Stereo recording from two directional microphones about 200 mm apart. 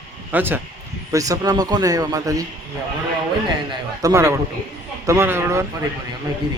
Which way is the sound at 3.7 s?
15° right (ahead or behind).